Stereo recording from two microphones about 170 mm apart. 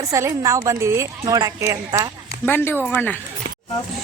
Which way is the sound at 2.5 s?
10° left (ahead or behind).